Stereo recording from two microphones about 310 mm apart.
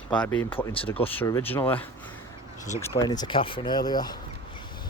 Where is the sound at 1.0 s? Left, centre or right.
Centre.